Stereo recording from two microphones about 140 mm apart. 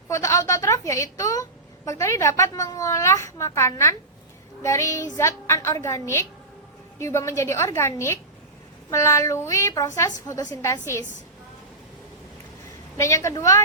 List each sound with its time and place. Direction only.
0.1 s a woman's voice: 20° left (ahead or behind)
13.0 s a woman's voice: 20° left (ahead or behind)